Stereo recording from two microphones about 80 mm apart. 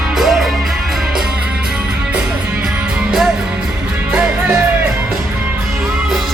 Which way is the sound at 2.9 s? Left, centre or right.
Centre.